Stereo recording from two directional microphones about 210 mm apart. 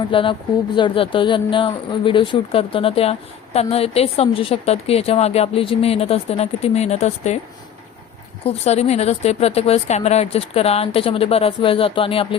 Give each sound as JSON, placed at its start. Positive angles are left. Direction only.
{"t": 0.1, "sound": "a woman's voice", "side_deg": 25}
{"t": 8.4, "sound": "a woman's voice", "side_deg": 30}